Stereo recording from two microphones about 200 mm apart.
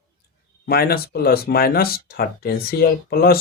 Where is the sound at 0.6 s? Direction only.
50° left (ahead or behind).